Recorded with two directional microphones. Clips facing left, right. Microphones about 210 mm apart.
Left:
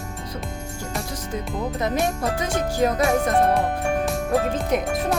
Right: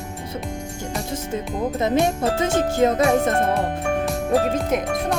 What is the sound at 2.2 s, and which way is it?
Music, 25° right (ahead or behind).